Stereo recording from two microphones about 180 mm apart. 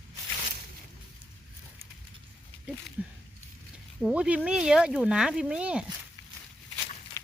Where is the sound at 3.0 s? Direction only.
5° right (ahead or behind).